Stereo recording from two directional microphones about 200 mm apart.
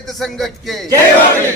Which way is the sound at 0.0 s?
Centre (ahead or behind).